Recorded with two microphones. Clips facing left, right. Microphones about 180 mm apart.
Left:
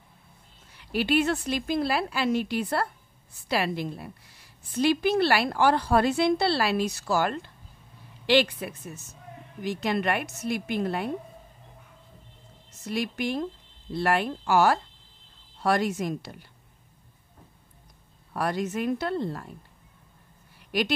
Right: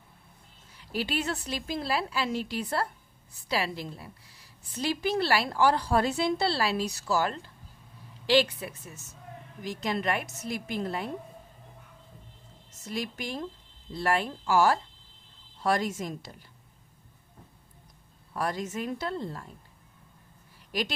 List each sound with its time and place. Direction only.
0.7 s a woman's voice: 65° left (ahead or behind)
12.8 s a woman's voice: 65° left (ahead or behind)
18.3 s a woman's voice: 65° left (ahead or behind)
20.7 s a woman's voice: 65° left (ahead or behind)